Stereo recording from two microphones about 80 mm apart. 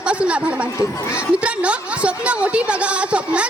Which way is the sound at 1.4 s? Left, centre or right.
Centre.